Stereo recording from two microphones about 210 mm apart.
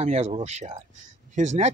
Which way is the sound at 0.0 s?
30° right (ahead or behind).